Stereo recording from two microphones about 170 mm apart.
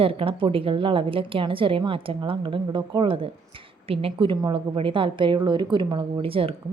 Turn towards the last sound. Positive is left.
turn(degrees=-35)  # may be behind; listen again after turning